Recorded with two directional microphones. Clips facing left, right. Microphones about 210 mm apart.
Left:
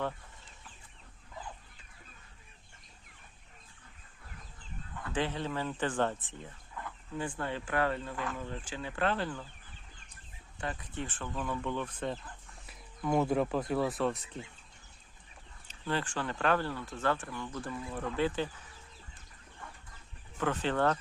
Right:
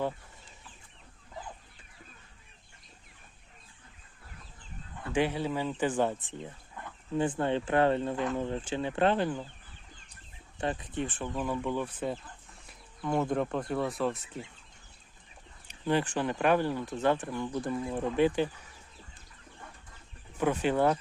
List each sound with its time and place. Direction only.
5.1 s speech: 10° right (ahead or behind)
7.2 s speech: 25° right (ahead or behind)
10.6 s speech: 25° right (ahead or behind); by 14.2 s centre (ahead or behind)
15.6 s speech: 15° right (ahead or behind)
20.4 s speech: 10° right (ahead or behind)